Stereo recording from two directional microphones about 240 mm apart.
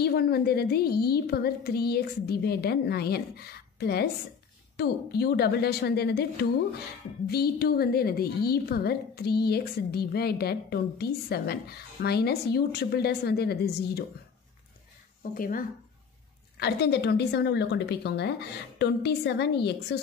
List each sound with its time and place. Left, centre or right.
0.0 s a woman's voice: left
7.2 s a woman's voice: left
15.3 s a woman's voice: left